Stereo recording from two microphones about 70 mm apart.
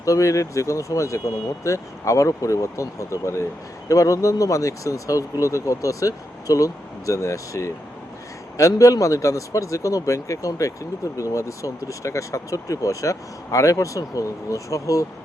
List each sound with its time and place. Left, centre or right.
0.0 s speech: left